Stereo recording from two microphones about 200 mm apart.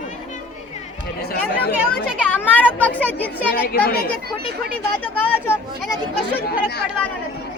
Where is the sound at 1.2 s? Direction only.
50° left (ahead or behind).